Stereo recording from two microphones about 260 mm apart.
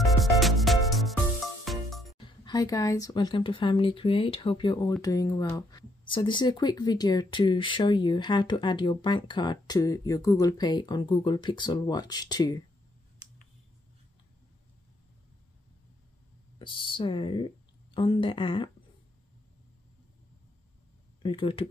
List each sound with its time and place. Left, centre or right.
0.2 s music: centre
2.1 s speech: centre
16.5 s speech: centre
21.2 s speech: centre